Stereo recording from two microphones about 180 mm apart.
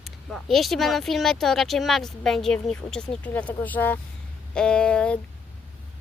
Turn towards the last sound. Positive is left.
turn(degrees=5)  # may be behind; listen again after turning